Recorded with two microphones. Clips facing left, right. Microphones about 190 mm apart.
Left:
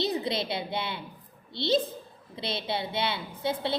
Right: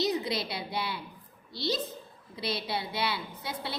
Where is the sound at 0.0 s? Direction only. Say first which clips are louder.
Left 1 dB; 25° left (ahead or behind).